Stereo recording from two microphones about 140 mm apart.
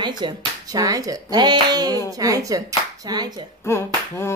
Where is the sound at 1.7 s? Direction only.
30° right (ahead or behind).